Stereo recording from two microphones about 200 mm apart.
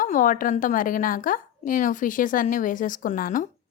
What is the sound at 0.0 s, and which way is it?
A woman's voice, 40° left (ahead or behind).